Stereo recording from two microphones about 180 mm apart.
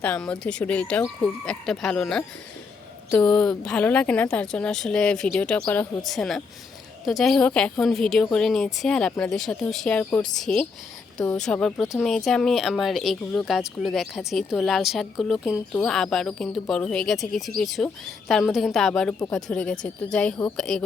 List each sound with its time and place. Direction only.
0.0 s a woman's voice: 10° left (ahead or behind)